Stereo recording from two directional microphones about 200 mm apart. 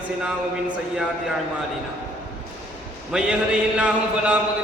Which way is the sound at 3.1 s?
5° right (ahead or behind).